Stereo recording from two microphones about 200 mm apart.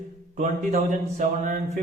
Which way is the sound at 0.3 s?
35° right (ahead or behind).